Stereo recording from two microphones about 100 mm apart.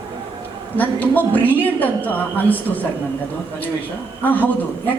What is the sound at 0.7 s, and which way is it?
A woman's voice, 15° left (ahead or behind).